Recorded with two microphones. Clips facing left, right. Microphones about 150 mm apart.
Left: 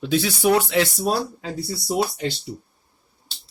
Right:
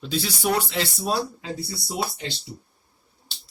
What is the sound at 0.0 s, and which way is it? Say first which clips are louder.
Speech: left 6 dB; 55° left (ahead or behind).